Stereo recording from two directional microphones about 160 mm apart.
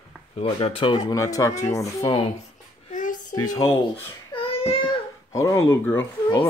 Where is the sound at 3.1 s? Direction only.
25° left (ahead or behind).